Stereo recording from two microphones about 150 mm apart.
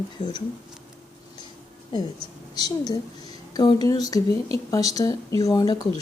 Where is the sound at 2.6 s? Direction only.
25° left (ahead or behind).